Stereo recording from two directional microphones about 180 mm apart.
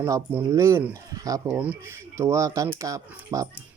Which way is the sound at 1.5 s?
10° right (ahead or behind).